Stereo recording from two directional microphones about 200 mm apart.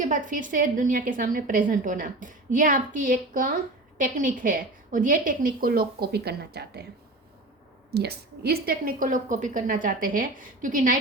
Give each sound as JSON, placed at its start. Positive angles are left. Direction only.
{"t": 0.0, "sound": "a woman's voice", "side_deg": -40}
{"t": 7.9, "sound": "a woman's voice", "side_deg": -55}